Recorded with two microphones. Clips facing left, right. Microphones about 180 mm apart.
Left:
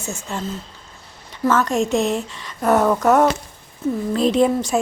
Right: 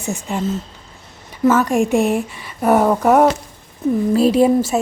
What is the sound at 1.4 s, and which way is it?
A woman's voice, 10° right (ahead or behind).